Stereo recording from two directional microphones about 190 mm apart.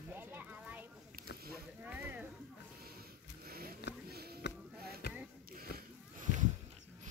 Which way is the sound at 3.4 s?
55° right (ahead or behind).